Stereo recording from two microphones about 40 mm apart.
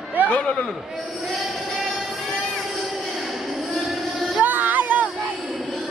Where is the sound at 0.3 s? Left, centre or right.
Left.